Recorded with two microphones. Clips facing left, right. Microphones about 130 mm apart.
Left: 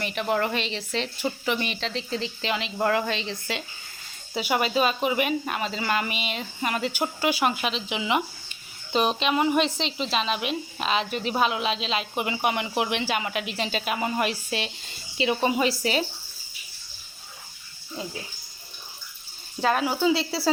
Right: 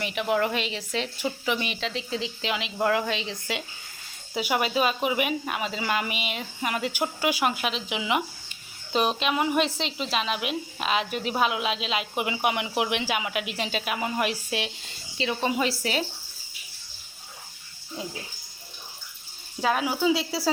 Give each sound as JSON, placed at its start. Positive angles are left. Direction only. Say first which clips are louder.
{"t": 0.0, "sound": "speech", "louder": "even", "side_deg": -5}
{"t": 4.4, "sound": "a woman's voice", "louder": "left 1 dB", "side_deg": -5}
{"t": 15.2, "sound": "speech", "louder": "left 3 dB", "side_deg": 10}
{"t": 19.6, "sound": "a woman's voice", "louder": "left 1 dB", "side_deg": -5}